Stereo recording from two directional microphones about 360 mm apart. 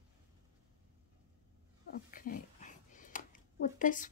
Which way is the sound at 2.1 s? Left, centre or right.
Left.